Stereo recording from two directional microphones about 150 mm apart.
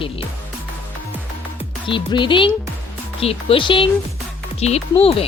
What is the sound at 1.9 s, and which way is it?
Speech, 35° left (ahead or behind).